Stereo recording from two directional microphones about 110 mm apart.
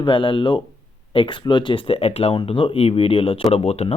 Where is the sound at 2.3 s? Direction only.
50° left (ahead or behind).